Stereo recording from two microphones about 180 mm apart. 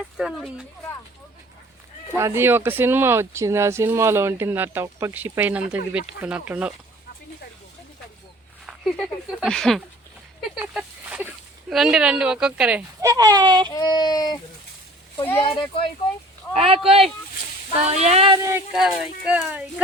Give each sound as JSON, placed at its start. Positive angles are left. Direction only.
{"t": 0.2, "sound": "speech", "side_deg": 0}
{"t": 2.1, "sound": "speech", "side_deg": -15}
{"t": 8.6, "sound": "speech", "side_deg": 0}
{"t": 10.5, "sound": "a sound", "side_deg": -5}
{"t": 11.7, "sound": "speech", "side_deg": -5}
{"t": 13.0, "sound": "speech", "side_deg": -20}
{"t": 13.7, "sound": "speech", "side_deg": 25}
{"t": 15.4, "sound": "speech", "side_deg": 30}
{"t": 16.6, "sound": "a sound", "side_deg": -35}
{"t": 18.8, "sound": "speech", "side_deg": -5}